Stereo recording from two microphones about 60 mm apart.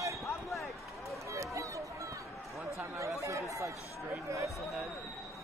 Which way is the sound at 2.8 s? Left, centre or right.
Right.